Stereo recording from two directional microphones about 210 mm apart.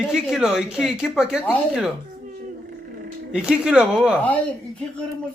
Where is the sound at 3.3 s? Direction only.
5° right (ahead or behind).